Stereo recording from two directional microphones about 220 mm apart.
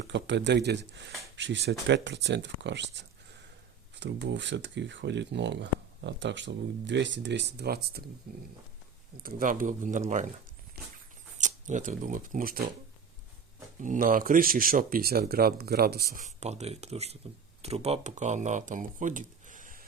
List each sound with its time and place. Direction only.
0.0 s speech: 55° right (ahead or behind)
9.2 s speech: 40° right (ahead or behind)
11.3 s speech: 35° right (ahead or behind)
13.8 s speech: 35° right (ahead or behind)
16.2 s speech: 30° right (ahead or behind)